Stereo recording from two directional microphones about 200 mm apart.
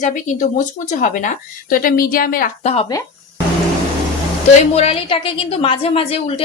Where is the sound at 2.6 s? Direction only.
30° left (ahead or behind).